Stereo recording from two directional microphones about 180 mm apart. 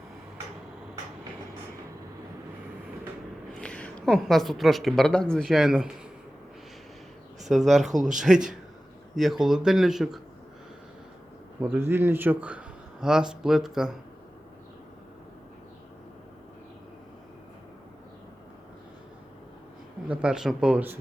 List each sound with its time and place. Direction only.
3.5 s a woman's voice: 5° left (ahead or behind)
7.4 s speech: centre (ahead or behind)
11.6 s speech: 10° right (ahead or behind)
20.1 s speech: 5° right (ahead or behind)